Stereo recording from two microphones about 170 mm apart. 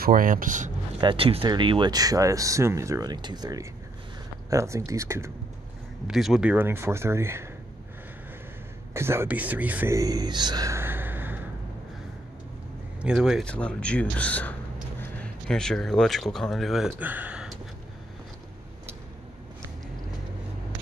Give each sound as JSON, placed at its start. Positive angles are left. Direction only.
{"t": 0.0, "sound": "speech", "side_deg": -55}
{"t": 1.0, "sound": "speech", "side_deg": -35}
{"t": 6.0, "sound": "speech", "side_deg": 0}
{"t": 8.9, "sound": "speech", "side_deg": -15}
{"t": 13.0, "sound": "speech", "side_deg": -5}